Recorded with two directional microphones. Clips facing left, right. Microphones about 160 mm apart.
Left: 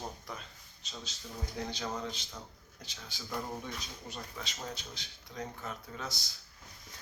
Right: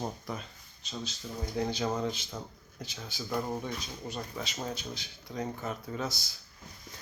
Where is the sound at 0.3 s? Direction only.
5° right (ahead or behind).